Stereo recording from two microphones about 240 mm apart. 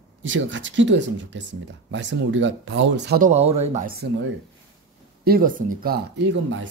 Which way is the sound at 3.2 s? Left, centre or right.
Right.